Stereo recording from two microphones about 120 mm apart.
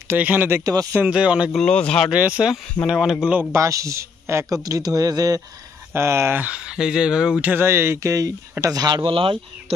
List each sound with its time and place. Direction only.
0.1 s speech: 15° right (ahead or behind)
0.7 s speech: 30° right (ahead or behind)
1.0 s speech: 10° right (ahead or behind)
1.6 s speech: 10° left (ahead or behind)
2.0 s speech: 10° right (ahead or behind)
3.5 s speech: 25° right (ahead or behind)
5.9 s speech: 20° right (ahead or behind)
7.4 s speech: 20° right (ahead or behind); by 9.4 s 50° right (ahead or behind)